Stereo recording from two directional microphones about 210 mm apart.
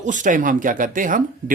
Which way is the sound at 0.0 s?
35° right (ahead or behind).